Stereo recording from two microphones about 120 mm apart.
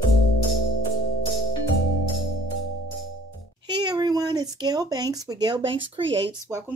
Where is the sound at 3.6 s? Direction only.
40° right (ahead or behind).